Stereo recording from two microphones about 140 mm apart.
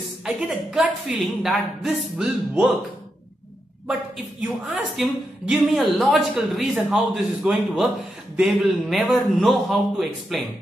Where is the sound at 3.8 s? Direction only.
5° right (ahead or behind).